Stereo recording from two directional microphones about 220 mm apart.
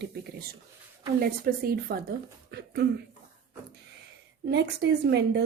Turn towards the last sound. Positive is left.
turn(degrees=-50)  # may be behind; listen again after turning